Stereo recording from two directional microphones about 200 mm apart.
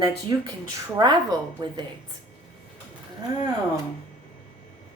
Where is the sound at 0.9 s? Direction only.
20° right (ahead or behind).